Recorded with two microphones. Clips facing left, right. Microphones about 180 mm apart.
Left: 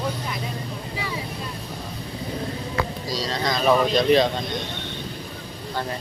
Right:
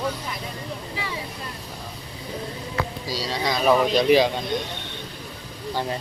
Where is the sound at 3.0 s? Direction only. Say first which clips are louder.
Left 1 dB; 5° right (ahead or behind).